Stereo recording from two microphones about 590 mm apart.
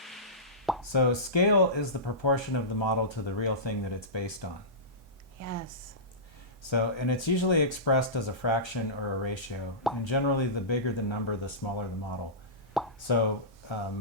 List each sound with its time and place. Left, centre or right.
0.0 s plop: centre
0.9 s speech: left
5.4 s a woman's voice: right
6.7 s speech: left
13.1 s speech: left